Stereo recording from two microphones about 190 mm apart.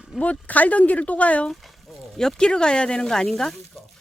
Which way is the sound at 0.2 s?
5° left (ahead or behind).